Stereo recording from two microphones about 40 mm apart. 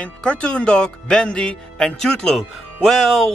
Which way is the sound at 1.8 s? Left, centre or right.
Centre.